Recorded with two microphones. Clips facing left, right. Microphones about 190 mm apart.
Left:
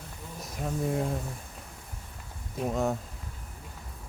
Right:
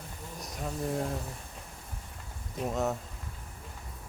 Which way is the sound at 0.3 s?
Centre (ahead or behind).